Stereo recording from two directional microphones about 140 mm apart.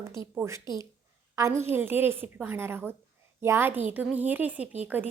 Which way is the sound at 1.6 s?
15° right (ahead or behind).